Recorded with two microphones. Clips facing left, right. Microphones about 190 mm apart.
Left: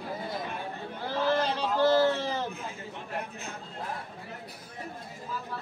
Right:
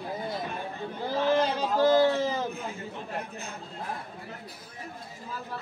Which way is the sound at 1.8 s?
15° right (ahead or behind).